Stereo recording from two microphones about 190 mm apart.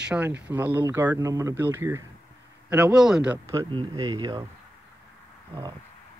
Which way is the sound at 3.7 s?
25° right (ahead or behind).